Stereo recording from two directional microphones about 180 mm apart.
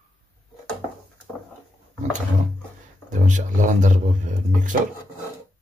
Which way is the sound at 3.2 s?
45° right (ahead or behind).